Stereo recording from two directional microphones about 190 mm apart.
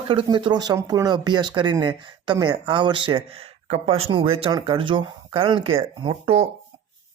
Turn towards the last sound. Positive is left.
turn(degrees=-30)  # may be behind; listen again after turning